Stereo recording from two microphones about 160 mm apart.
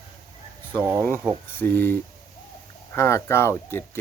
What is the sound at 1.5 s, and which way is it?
Speech, 15° left (ahead or behind).